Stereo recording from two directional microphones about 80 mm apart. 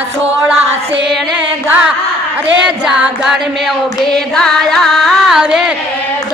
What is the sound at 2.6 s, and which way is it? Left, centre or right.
Music, centre.